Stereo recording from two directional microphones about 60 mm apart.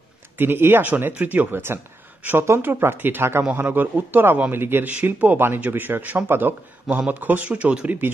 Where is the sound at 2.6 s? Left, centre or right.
Right.